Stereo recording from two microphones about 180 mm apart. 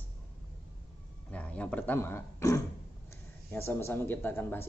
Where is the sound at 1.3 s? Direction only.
5° left (ahead or behind).